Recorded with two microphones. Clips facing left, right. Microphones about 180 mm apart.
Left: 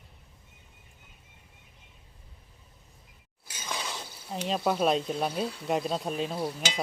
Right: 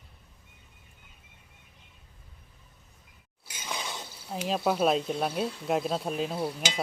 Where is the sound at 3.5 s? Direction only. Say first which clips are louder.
Even; 10° right (ahead or behind).